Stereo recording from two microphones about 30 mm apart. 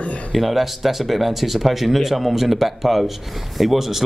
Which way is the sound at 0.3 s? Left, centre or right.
Centre.